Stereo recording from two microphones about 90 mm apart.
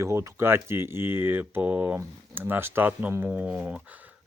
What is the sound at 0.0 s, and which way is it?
Speech, 30° right (ahead or behind).